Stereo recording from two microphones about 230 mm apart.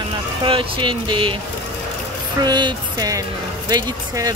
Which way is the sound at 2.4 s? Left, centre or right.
Centre.